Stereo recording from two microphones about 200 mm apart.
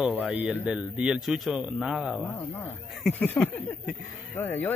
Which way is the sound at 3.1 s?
10° left (ahead or behind).